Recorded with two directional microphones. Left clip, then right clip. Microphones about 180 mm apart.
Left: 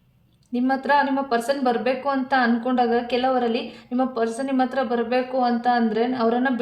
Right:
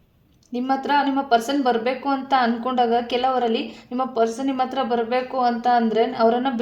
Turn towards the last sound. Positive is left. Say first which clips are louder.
# right 3 dB
turn(degrees=-30)  # may be behind; listen again after turning